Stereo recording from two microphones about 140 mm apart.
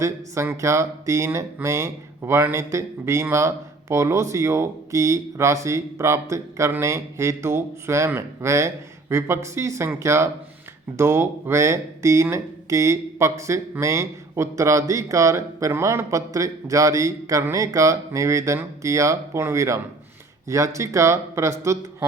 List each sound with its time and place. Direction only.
0.0 s speech: 20° right (ahead or behind)